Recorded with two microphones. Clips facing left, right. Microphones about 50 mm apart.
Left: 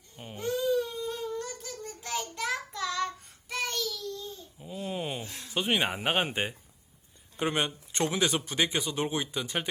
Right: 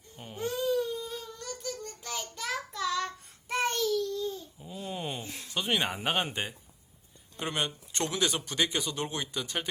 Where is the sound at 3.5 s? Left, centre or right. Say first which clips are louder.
Right 4 dB; right.